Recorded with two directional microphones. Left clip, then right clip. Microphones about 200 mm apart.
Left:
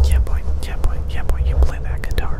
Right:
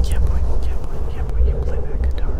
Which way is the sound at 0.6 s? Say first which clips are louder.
Left 1 dB; 30° left (ahead or behind).